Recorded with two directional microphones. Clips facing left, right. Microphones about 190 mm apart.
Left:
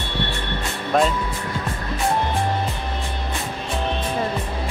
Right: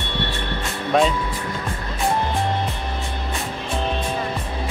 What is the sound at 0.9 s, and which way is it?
Speech, centre (ahead or behind).